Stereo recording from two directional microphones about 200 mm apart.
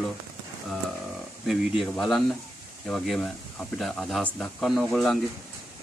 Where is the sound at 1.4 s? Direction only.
Centre (ahead or behind).